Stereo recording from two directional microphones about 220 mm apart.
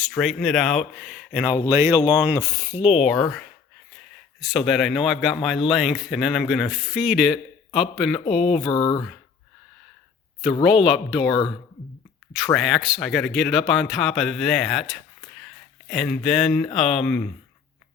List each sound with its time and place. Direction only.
0.0 s speech: centre (ahead or behind)
4.4 s speech: centre (ahead or behind)
8.7 s speech: 20° left (ahead or behind)
10.8 s speech: centre (ahead or behind)
12.5 s speech: centre (ahead or behind)